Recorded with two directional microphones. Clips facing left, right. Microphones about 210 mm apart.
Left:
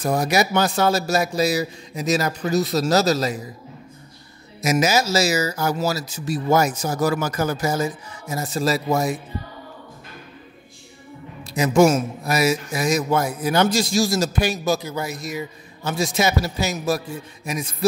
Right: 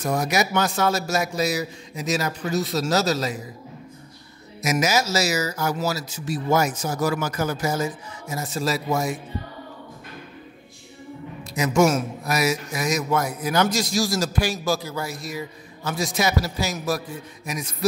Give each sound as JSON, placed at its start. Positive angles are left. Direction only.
{"t": 0.0, "sound": "a man's voice", "side_deg": 30}
{"t": 4.6, "sound": "a man's voice", "side_deg": 30}
{"t": 11.5, "sound": "a man's voice", "side_deg": 30}